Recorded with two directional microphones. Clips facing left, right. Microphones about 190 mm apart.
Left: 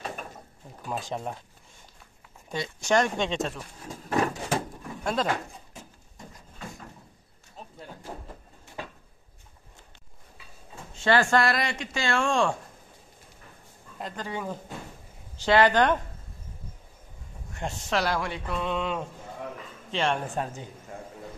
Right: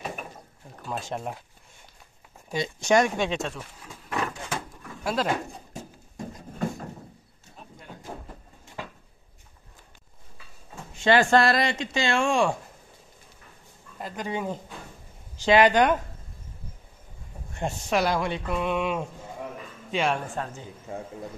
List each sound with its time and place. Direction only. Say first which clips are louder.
0.0 s mechanisms: right 1 dB; 10° right (ahead or behind)
0.8 s speech: even; centre (ahead or behind)
2.5 s speech: right 3 dB; 20° right (ahead or behind); by 3.6 s centre (ahead or behind)
3.8 s a sound: left 5 dB; 40° left (ahead or behind)
5.0 s speech: right 1 dB; 5° right (ahead or behind)
11.2 s speech: right 3 dB; 30° right (ahead or behind); by 12.5 s 10° right (ahead or behind)
14.1 s speech: right 4 dB; 20° right (ahead or behind)
17.6 s speech: right 3 dB; 15° right (ahead or behind)
20.4 s a man's voice: left 2 dB; 15° left (ahead or behind)